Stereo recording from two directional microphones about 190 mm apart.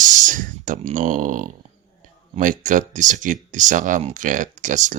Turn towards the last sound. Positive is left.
turn(degrees=-40)  # may be behind; listen again after turning